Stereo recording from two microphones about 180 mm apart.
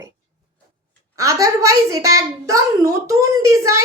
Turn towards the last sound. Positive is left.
turn(degrees=-15)  # may be behind; listen again after turning